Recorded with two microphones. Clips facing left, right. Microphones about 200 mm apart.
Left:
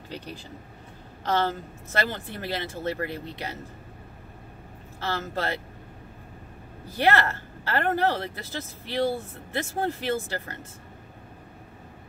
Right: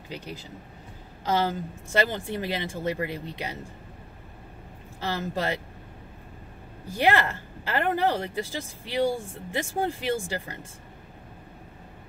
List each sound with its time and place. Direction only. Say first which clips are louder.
1.2 s speech: even; 10° right (ahead or behind)
5.0 s speech: right 1 dB; 15° right (ahead or behind)
7.0 s speech: even; 15° right (ahead or behind)